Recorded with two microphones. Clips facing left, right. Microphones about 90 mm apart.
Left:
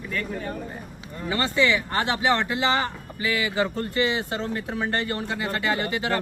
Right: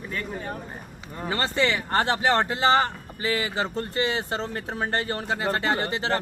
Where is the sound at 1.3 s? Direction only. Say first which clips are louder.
Left 2 dB; 40° right (ahead or behind).